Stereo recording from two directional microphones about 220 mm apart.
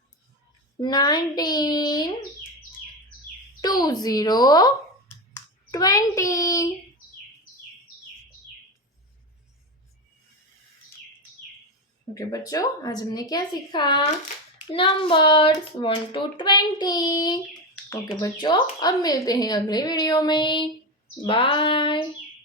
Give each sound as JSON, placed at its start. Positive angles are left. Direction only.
{"t": 0.8, "sound": "a woman's voice", "side_deg": 20}
{"t": 3.6, "sound": "speech", "side_deg": 15}
{"t": 12.1, "sound": "a woman's voice", "side_deg": 15}